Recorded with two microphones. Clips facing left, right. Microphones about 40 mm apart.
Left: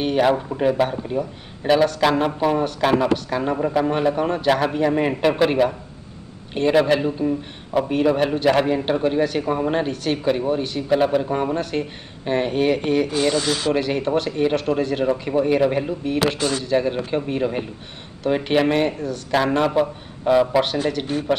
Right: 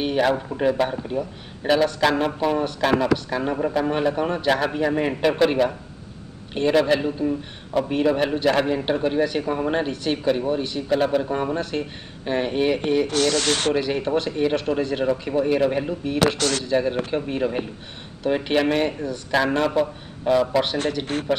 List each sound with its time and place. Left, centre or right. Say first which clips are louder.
0.0 s a man's voice: left 2 dB; centre
13.1 s speech: left 1 dB; right
13.7 s a man's voice: left 1 dB; centre
16.3 s a man's voice: left 1 dB; right
16.6 s a man's voice: left 1 dB; centre
21.1 s speech: left 2 dB; right